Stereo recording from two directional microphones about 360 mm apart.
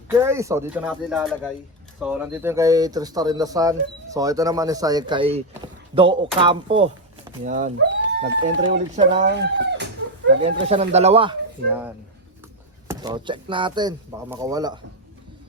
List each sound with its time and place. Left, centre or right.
0.1 s speech: centre
9.1 s speech: right
10.4 s speech: centre
12.9 s speech: centre